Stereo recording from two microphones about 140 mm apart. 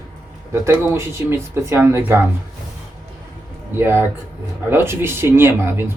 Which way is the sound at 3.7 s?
15° right (ahead or behind).